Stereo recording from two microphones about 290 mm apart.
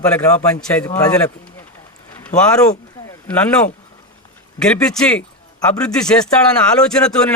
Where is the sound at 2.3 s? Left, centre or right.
Left.